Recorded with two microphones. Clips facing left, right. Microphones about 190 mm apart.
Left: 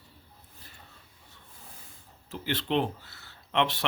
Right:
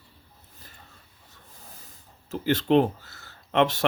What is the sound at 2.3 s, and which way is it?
Speech, 45° right (ahead or behind).